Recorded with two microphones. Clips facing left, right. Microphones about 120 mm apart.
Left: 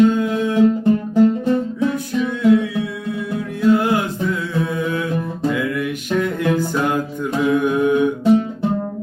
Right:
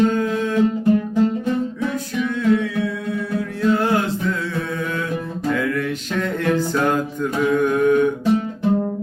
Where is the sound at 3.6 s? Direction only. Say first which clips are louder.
Left 3 dB; 15° left (ahead or behind).